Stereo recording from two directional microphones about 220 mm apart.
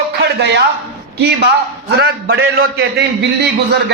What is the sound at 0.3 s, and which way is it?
Speech, 50° right (ahead or behind).